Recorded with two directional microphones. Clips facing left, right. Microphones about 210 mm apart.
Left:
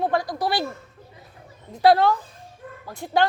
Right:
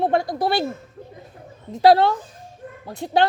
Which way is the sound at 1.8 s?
25° right (ahead or behind).